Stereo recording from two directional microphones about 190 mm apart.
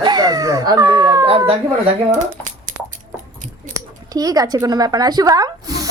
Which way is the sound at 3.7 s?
20° right (ahead or behind).